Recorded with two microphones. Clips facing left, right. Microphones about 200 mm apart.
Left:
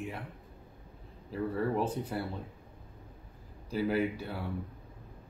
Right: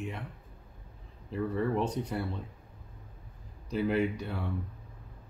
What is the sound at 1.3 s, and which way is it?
Speech, 5° left (ahead or behind).